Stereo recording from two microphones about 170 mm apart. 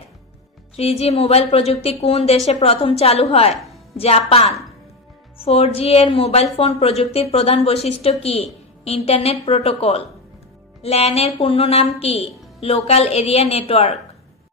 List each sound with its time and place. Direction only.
0.7 s a woman's voice: 40° left (ahead or behind)